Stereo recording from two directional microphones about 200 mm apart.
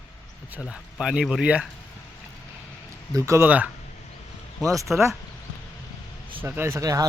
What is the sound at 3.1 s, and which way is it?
Speech, 15° right (ahead or behind).